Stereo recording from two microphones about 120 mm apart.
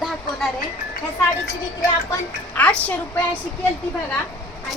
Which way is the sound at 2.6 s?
10° left (ahead or behind).